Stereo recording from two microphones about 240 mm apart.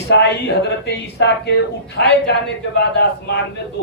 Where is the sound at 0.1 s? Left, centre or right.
Left.